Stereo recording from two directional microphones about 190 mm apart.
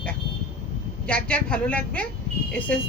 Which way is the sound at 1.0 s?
5° left (ahead or behind).